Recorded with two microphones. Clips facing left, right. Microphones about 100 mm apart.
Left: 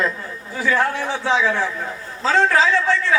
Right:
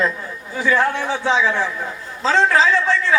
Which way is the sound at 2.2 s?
25° right (ahead or behind).